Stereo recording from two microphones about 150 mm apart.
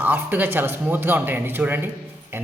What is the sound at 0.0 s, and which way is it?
A man's voice, 10° right (ahead or behind).